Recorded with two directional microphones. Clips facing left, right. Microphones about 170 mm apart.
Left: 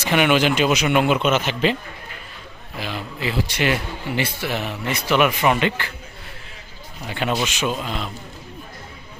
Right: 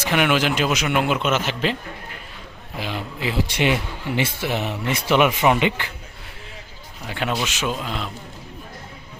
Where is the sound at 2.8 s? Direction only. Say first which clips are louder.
Even; 15° right (ahead or behind).